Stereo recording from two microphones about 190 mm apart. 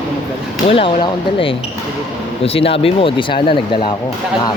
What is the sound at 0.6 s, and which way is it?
Speech, 30° left (ahead or behind).